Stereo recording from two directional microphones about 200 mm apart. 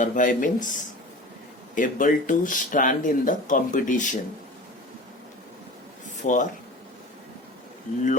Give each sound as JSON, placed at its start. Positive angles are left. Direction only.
{"t": 0.0, "sound": "speech", "side_deg": 40}
{"t": 6.2, "sound": "speech", "side_deg": 40}